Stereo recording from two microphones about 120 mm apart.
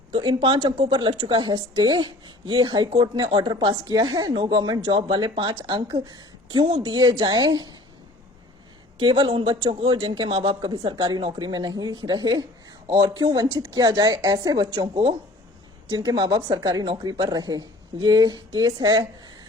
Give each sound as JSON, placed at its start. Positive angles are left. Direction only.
{"t": 0.1, "sound": "a man's voice", "side_deg": -45}
{"t": 9.0, "sound": "a man's voice", "side_deg": -45}